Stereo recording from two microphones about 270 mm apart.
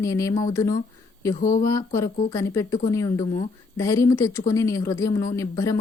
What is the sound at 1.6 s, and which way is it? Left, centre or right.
Speech, centre.